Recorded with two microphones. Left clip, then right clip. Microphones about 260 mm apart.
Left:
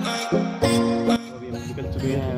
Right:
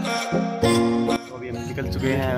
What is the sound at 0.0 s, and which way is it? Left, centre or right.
Music, centre.